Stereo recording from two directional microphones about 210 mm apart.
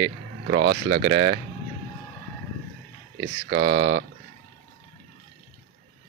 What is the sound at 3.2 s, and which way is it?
Speech, 50° right (ahead or behind).